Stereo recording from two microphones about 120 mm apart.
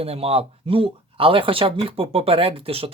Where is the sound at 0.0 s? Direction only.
55° right (ahead or behind).